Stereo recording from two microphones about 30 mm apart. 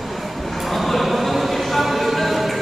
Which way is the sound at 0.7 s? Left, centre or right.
Centre.